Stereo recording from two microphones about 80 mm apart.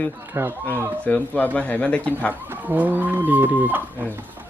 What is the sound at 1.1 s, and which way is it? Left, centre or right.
Speech, centre.